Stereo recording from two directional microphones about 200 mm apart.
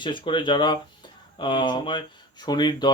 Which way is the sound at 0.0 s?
25° left (ahead or behind).